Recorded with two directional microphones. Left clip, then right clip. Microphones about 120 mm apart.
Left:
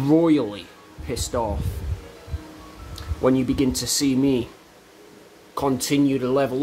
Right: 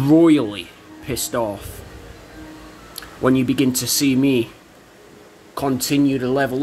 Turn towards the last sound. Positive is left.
turn(degrees=25)  # may be behind; listen again after turning